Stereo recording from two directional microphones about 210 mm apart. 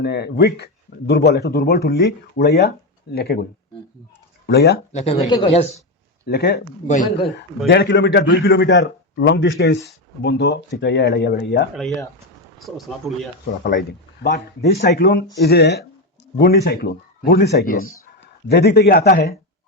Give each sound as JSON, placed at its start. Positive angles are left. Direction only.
{"t": 0.0, "sound": "speech", "side_deg": 50}
{"t": 4.4, "sound": "speech", "side_deg": 50}
{"t": 4.9, "sound": "speech", "side_deg": 30}
{"t": 6.2, "sound": "speech", "side_deg": 50}
{"t": 6.8, "sound": "speech", "side_deg": 35}
{"t": 7.7, "sound": "a man's voice", "side_deg": 55}
{"t": 12.5, "sound": "speech", "side_deg": 0}
{"t": 13.7, "sound": "speech", "side_deg": 45}